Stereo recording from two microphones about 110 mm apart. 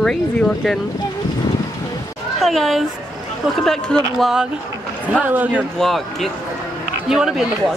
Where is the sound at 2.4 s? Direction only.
Centre (ahead or behind).